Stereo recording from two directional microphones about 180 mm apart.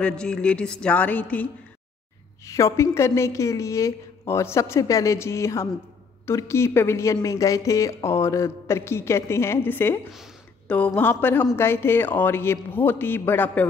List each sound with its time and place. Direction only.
0.0 s a woman's voice: 5° left (ahead or behind)